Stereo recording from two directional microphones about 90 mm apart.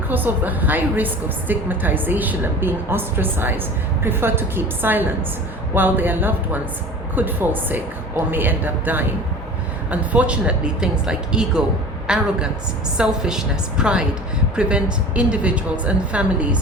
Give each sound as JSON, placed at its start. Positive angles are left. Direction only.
{"t": 0.1, "sound": "a woman's voice", "side_deg": -20}